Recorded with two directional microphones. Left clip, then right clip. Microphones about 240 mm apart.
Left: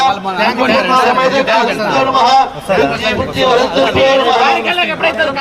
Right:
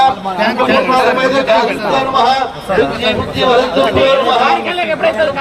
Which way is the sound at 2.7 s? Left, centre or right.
Left.